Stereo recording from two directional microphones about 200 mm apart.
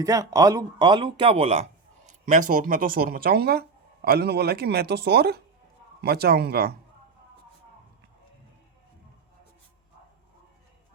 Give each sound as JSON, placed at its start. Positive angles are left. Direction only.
{"t": 0.0, "sound": "speech", "side_deg": -15}
{"t": 2.5, "sound": "speech", "side_deg": -45}